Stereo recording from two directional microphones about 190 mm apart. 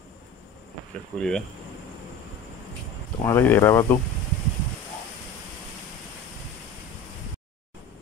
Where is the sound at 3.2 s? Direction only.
10° left (ahead or behind).